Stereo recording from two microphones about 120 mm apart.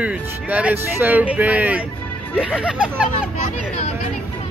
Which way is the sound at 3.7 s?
65° left (ahead or behind).